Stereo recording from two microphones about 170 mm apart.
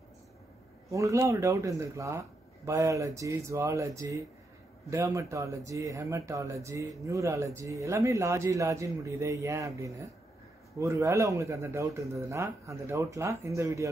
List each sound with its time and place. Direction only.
0.8 s speech: 20° right (ahead or behind)